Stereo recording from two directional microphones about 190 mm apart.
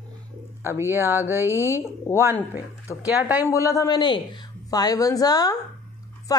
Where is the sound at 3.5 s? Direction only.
15° left (ahead or behind).